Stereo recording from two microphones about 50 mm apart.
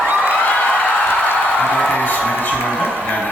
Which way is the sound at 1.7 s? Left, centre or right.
Left.